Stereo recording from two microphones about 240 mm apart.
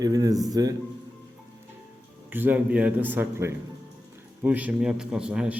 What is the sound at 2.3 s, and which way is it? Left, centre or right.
A man's voice, centre.